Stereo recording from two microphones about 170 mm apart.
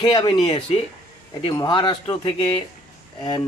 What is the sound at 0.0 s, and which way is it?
Speech, 25° left (ahead or behind).